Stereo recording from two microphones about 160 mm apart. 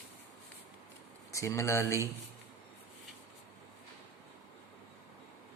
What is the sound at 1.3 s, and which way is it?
Speech, 20° left (ahead or behind).